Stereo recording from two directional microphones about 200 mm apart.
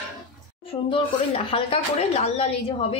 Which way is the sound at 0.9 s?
25° left (ahead or behind).